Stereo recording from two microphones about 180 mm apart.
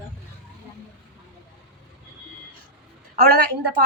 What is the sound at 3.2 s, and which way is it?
Speech, 55° right (ahead or behind).